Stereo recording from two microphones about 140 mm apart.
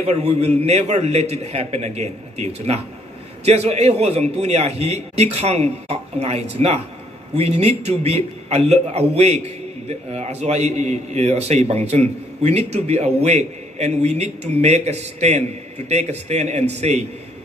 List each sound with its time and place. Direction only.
0.0 s a man's voice: 50° right (ahead or behind)